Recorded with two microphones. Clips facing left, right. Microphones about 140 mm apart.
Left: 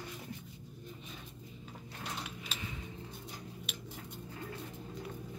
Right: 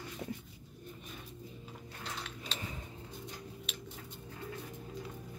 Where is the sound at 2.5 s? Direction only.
5° left (ahead or behind).